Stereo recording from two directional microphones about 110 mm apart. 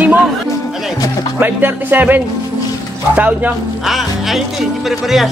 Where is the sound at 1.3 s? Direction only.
20° right (ahead or behind).